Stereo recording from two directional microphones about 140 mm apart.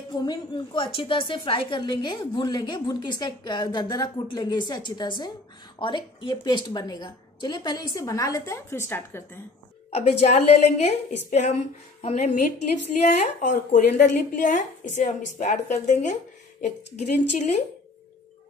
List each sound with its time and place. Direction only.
0.1 s a woman's voice: 30° left (ahead or behind)
9.8 s a woman's voice: 50° left (ahead or behind)